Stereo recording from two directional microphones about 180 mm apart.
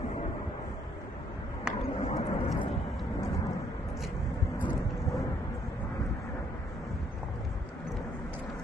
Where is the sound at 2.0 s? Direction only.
35° left (ahead or behind).